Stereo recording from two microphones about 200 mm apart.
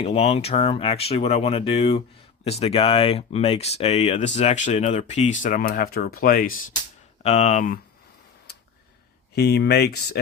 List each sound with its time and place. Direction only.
0.0 s speech: 30° left (ahead or behind)
7.2 s speech: 35° left (ahead or behind)
9.3 s speech: 55° left (ahead or behind)